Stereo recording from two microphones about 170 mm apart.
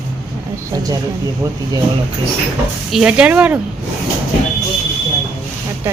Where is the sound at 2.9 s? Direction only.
5° right (ahead or behind).